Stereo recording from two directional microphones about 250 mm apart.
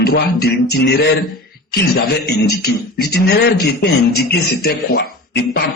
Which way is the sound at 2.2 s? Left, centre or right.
Left.